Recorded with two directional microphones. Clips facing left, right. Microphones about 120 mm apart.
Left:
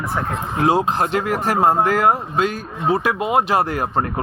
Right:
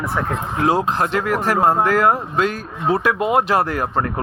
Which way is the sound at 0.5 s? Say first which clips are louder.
Left 1 dB; 20° left (ahead or behind).